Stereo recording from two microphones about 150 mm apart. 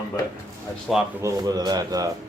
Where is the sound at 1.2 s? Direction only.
20° right (ahead or behind).